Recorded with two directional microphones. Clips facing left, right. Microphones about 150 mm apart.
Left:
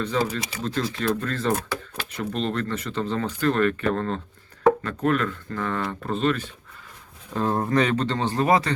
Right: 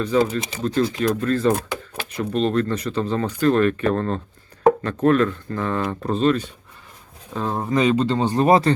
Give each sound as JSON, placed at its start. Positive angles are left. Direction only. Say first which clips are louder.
{"t": 0.2, "sound": "speech", "louder": "right 5 dB", "side_deg": -20}
{"t": 7.3, "sound": "speech", "louder": "even", "side_deg": 0}